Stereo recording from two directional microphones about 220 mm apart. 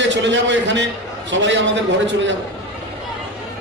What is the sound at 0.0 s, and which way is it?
A man's voice, 55° right (ahead or behind).